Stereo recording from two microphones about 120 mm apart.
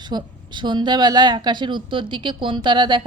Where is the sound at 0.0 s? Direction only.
35° right (ahead or behind).